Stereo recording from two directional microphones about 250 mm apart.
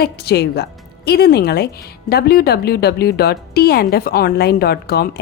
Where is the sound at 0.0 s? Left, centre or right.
Left.